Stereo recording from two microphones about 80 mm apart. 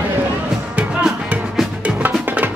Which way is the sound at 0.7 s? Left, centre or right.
Centre.